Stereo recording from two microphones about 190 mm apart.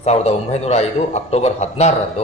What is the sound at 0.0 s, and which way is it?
A man's voice, 35° left (ahead or behind).